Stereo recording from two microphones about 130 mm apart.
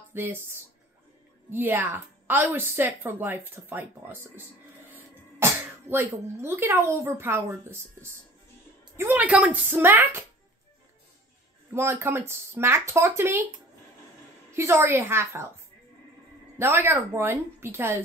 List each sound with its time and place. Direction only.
0.1 s a woman's voice: 15° right (ahead or behind)
11.7 s speech: 20° right (ahead or behind)
14.5 s speech: 20° right (ahead or behind)
16.5 s speech: 20° right (ahead or behind)